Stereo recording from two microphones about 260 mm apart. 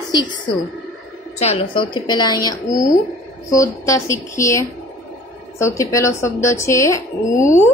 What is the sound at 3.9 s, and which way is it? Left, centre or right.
Speech, centre.